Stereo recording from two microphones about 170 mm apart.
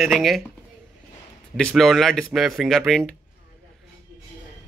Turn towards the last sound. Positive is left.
turn(degrees=0)  # may be behind; listen again after turning